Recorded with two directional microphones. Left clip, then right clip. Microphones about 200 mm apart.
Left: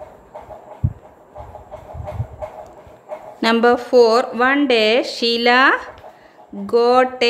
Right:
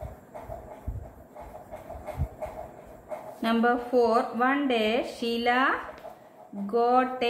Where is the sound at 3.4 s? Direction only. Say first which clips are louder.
Left 11 dB; 45° left (ahead or behind).